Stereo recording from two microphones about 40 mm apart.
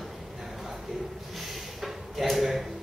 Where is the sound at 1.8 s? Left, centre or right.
Centre.